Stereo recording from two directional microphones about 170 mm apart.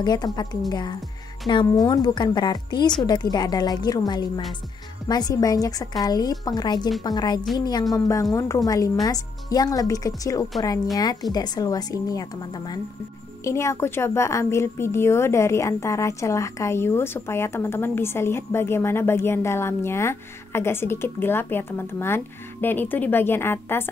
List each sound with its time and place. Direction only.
0.0 s a woman's voice: 25° left (ahead or behind)